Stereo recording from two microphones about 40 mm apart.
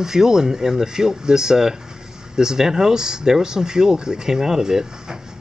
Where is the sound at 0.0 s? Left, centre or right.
Centre.